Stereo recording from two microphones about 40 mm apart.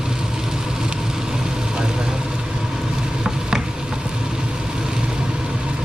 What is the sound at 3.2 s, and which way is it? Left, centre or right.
Stir, centre.